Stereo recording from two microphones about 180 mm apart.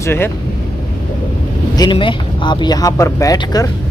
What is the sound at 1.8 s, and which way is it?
Speech, 25° left (ahead or behind).